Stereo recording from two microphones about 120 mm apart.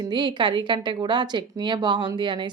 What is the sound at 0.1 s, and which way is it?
Speech, 40° right (ahead or behind).